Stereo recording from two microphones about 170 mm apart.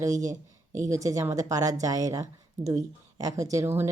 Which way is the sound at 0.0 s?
20° right (ahead or behind).